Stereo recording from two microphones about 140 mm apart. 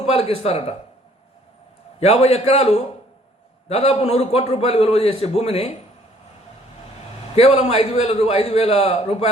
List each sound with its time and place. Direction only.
0.0 s a man's voice: 45° left (ahead or behind)
2.0 s a man's voice: 50° left (ahead or behind)
7.3 s a man's voice: 45° left (ahead or behind)